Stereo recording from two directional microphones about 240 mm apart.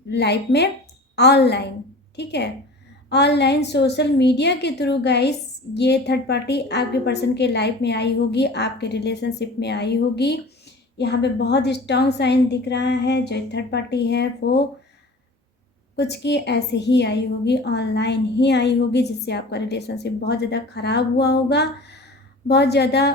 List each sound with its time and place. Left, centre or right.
0.1 s a woman's voice: left
16.0 s a woman's voice: left